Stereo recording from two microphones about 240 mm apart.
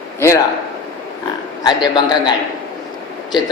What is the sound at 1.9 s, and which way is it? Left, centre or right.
Speech, centre.